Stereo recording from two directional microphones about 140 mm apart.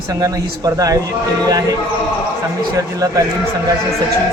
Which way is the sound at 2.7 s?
25° right (ahead or behind).